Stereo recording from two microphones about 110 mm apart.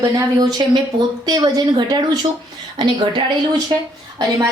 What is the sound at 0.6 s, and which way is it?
A woman's voice, 35° right (ahead or behind).